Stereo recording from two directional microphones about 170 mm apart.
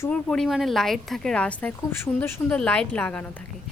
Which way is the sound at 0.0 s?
5° left (ahead or behind).